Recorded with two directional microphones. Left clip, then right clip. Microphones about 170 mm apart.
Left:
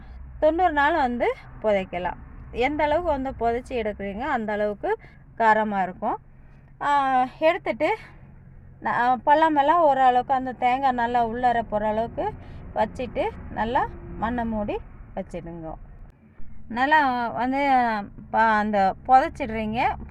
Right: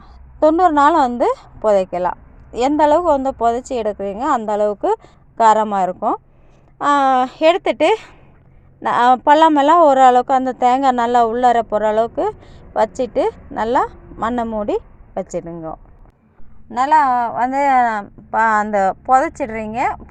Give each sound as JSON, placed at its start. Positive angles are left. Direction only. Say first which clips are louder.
{"t": 0.3, "sound": "a woman's voice", "louder": "right 8 dB", "side_deg": -35}
{"t": 6.7, "sound": "a woman's voice", "louder": "right 7 dB", "side_deg": -55}
{"t": 16.6, "sound": "speech", "louder": "right 7 dB", "side_deg": -25}
{"t": 17.6, "sound": "speech", "louder": "right 6 dB", "side_deg": 0}
{"t": 18.0, "sound": "a woman's voice", "louder": "right 5 dB", "side_deg": -15}